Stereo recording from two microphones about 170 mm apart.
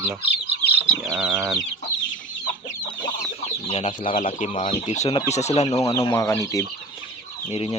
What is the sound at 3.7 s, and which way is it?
Speech, 40° left (ahead or behind).